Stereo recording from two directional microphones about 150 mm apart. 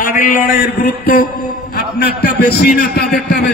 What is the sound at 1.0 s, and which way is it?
A man's voice, 80° left.